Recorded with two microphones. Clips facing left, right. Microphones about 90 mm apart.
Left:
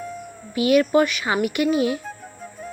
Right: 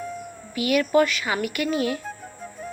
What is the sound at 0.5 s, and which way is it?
A woman's voice, 25° left (ahead or behind).